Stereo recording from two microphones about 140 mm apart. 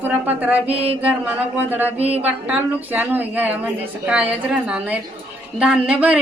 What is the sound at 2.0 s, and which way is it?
Speech, 45° right (ahead or behind).